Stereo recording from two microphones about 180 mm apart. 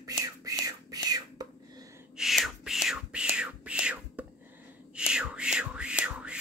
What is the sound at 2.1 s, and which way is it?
Whispering, centre (ahead or behind).